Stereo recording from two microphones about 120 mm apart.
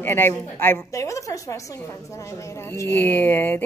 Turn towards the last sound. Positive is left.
turn(degrees=15)  # may be behind; listen again after turning